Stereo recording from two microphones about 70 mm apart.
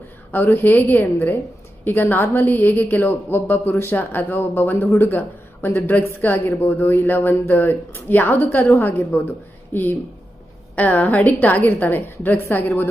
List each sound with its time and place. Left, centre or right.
0.3 s speech: left
2.5 s speech: left